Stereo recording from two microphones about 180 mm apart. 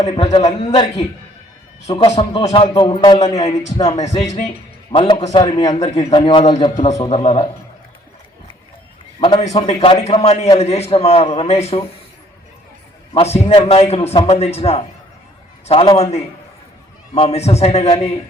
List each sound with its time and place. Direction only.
0.0 s speech: 35° left (ahead or behind)
3.8 s a man's voice: 40° left (ahead or behind)
4.1 s a man's voice: 20° left (ahead or behind); by 7.4 s 35° left (ahead or behind)
9.6 s a man's voice: 35° left (ahead or behind)
13.1 s a man's voice: 35° left (ahead or behind)